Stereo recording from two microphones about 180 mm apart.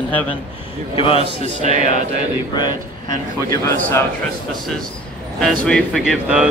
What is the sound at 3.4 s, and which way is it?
Speech, 20° left (ahead or behind).